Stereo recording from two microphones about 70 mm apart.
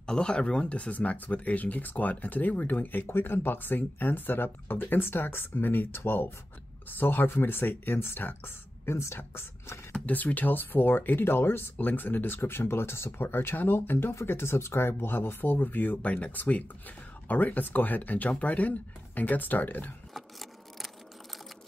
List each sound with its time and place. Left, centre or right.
0.0 s speech: centre; by 9.8 s left
10.0 s speech: left
20.2 s a sound: centre